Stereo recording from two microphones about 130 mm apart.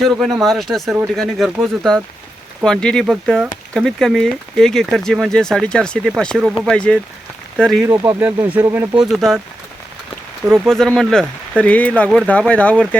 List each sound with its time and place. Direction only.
0.0 s speech: centre (ahead or behind)
7.8 s speech: 20° right (ahead or behind)
9.0 s speech: centre (ahead or behind)
10.4 s speech: 15° right (ahead or behind)
10.7 s speech: 5° left (ahead or behind)